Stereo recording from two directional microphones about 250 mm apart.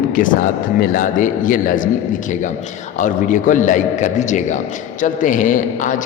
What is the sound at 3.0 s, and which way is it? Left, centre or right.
A man's voice, left.